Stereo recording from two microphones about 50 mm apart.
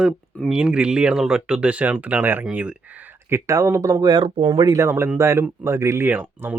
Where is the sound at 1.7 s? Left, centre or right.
Right.